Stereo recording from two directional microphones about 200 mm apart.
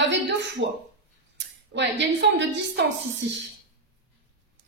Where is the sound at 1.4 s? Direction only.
65° right (ahead or behind).